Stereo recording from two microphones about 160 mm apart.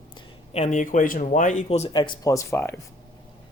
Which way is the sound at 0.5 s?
45° left (ahead or behind).